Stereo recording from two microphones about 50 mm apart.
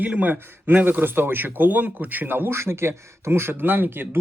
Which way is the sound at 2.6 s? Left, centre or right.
Right.